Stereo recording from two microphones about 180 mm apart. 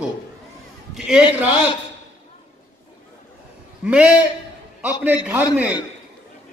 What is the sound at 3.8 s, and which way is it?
A man's voice, 5° right (ahead or behind).